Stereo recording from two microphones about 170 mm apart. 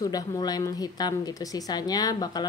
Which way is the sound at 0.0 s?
20° left (ahead or behind).